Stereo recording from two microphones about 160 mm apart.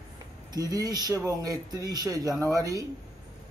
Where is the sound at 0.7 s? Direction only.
25° right (ahead or behind).